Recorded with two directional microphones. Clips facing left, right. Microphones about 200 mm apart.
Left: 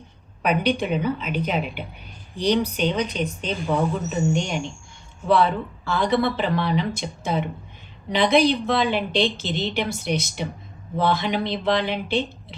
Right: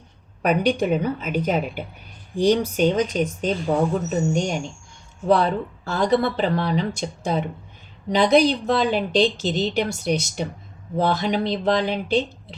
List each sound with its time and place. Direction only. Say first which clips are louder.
0.4 s a woman's voice: right 2 dB; 45° right (ahead or behind)